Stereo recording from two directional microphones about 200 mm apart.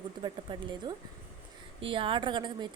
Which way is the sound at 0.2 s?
20° right (ahead or behind).